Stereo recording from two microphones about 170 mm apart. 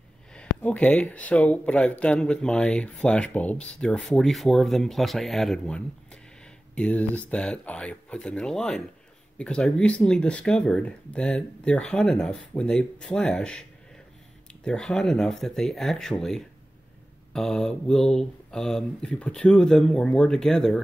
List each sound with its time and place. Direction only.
0.3 s speech: 5° left (ahead or behind)